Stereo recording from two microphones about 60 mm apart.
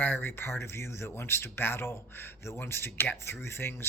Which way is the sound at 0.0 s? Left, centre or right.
Left.